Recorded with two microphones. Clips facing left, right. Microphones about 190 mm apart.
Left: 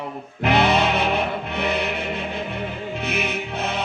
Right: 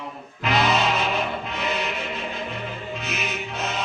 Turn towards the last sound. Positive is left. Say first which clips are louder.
# left 3 dB
turn(degrees=60)  # may be behind; listen again after turning